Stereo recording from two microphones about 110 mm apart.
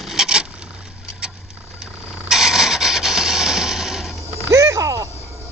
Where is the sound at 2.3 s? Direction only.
5° right (ahead or behind).